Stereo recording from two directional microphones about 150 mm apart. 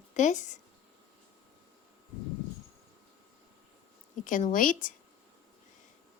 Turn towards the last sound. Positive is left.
turn(degrees=60)  # may be behind; listen again after turning